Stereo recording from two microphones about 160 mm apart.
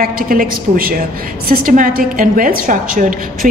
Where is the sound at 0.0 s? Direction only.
65° right (ahead or behind).